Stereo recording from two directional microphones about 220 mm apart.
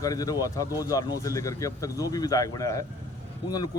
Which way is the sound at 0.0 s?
15° left (ahead or behind).